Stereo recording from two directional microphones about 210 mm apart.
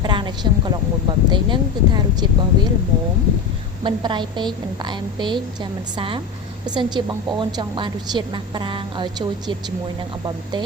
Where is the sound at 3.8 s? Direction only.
20° right (ahead or behind).